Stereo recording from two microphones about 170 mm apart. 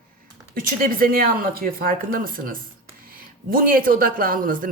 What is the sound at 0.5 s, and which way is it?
Speech, 55° right (ahead or behind).